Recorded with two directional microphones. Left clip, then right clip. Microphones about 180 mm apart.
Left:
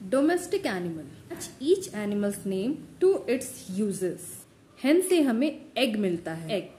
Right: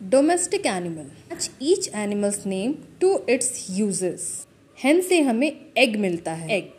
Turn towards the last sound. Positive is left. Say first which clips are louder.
# right 6 dB
turn(degrees=-15)  # may be behind; listen again after turning